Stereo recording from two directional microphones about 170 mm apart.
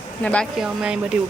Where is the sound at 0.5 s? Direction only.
5° right (ahead or behind).